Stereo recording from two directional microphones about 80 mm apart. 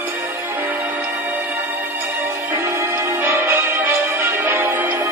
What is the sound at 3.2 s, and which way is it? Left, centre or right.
Music, right.